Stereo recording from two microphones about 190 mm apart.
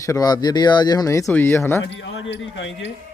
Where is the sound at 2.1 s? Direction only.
75° left (ahead or behind).